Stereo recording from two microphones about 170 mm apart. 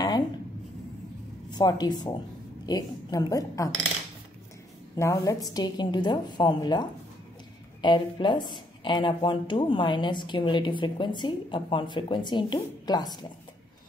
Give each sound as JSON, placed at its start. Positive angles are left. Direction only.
{"t": 1.5, "sound": "speech", "side_deg": 25}
{"t": 4.9, "sound": "speech", "side_deg": 15}